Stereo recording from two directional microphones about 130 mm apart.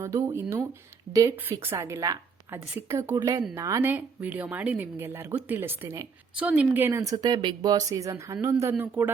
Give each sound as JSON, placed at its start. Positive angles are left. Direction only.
{"t": 0.0, "sound": "speech", "side_deg": -20}
{"t": 1.1, "sound": "speech", "side_deg": -45}
{"t": 1.5, "sound": "a woman's voice", "side_deg": -20}
{"t": 3.2, "sound": "speech", "side_deg": -35}
{"t": 3.5, "sound": "speech", "side_deg": -20}
{"t": 6.3, "sound": "speech", "side_deg": -10}